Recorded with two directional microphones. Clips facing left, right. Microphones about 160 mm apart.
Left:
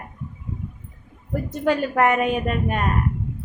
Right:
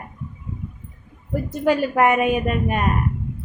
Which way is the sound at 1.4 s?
10° right (ahead or behind).